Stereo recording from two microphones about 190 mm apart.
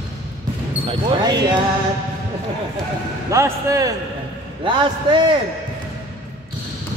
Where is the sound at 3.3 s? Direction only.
15° right (ahead or behind).